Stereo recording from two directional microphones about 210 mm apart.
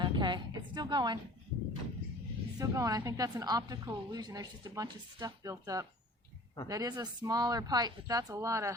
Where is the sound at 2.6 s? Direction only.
15° right (ahead or behind).